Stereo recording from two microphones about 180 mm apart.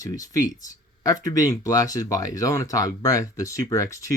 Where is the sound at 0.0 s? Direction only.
20° left (ahead or behind).